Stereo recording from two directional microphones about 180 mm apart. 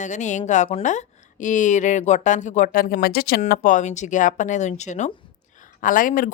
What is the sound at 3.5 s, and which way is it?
Speech, 45° left (ahead or behind).